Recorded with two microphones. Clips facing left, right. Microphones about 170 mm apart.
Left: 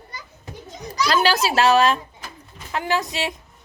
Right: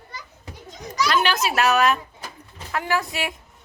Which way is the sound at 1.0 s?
35° left (ahead or behind).